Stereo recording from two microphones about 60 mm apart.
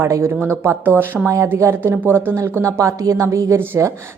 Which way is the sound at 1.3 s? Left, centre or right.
Right.